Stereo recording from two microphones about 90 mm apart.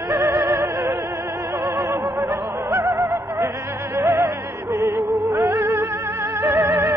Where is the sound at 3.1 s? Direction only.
50° right (ahead or behind).